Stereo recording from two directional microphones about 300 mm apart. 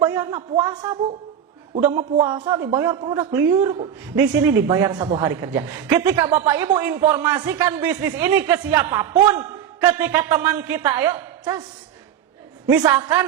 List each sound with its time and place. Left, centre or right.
0.0 s a man's voice: centre
12.6 s a man's voice: centre